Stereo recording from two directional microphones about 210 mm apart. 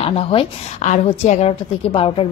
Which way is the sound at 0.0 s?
25° left (ahead or behind).